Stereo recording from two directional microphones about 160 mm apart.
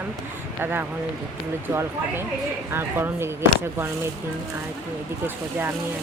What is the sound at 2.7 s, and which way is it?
Speech, 15° right (ahead or behind).